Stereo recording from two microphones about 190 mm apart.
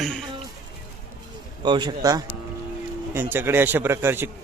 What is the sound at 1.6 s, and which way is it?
A man's voice, 25° right (ahead or behind).